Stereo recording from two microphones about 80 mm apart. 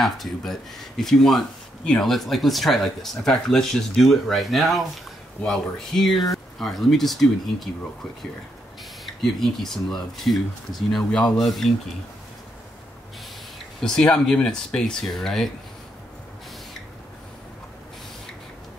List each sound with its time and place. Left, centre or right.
0.0 s speech: centre
9.0 s speech: centre
13.7 s speech: centre